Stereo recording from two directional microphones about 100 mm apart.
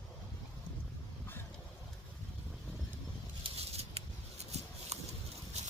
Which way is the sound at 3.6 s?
90° right.